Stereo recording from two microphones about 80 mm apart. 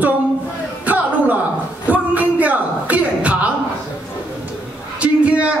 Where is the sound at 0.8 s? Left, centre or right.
Centre.